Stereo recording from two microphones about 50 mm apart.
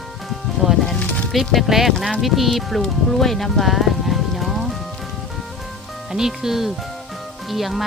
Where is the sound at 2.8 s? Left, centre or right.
Centre.